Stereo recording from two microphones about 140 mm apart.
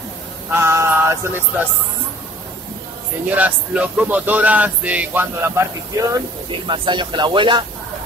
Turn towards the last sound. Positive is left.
turn(degrees=-35)  # may be behind; listen again after turning